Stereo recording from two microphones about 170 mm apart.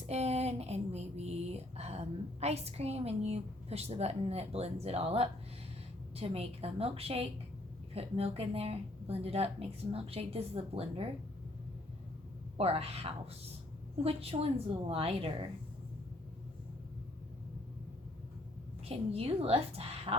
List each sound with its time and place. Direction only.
0.1 s a sound: 40° right (ahead or behind)
6.1 s speech: 35° right (ahead or behind)
12.5 s speech: 35° right (ahead or behind)
18.9 s speech: 35° right (ahead or behind)